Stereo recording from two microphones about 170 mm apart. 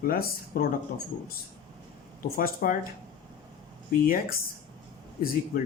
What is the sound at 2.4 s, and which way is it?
Speech, 55° left (ahead or behind).